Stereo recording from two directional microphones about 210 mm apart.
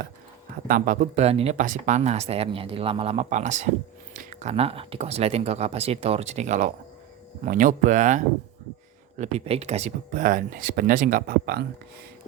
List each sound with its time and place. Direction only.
0.7 s speech: 35° right (ahead or behind)